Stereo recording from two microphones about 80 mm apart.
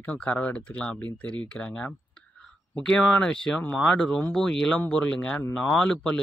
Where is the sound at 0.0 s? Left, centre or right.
Centre.